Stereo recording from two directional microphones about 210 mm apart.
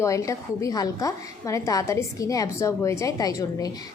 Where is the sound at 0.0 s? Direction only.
15° left (ahead or behind).